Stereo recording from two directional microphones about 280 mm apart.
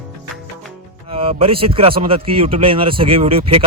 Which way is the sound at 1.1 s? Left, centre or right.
Centre.